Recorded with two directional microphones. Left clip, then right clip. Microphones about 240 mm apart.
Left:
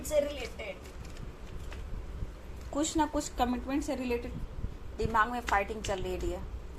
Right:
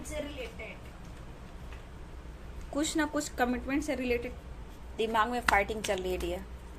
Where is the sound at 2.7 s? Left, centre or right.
Centre.